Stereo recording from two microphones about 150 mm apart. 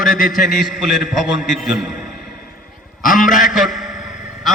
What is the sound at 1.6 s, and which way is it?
Speech, centre (ahead or behind).